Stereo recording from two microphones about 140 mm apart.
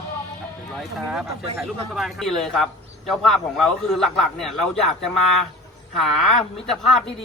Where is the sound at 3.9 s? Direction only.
Centre (ahead or behind).